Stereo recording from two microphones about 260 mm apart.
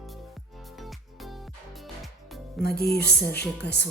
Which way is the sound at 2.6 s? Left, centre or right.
Left.